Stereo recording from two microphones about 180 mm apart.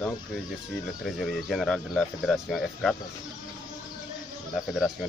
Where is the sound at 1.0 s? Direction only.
Centre (ahead or behind).